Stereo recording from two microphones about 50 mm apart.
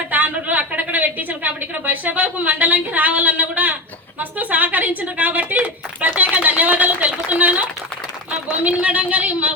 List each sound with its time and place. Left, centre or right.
0.1 s a woman's voice: right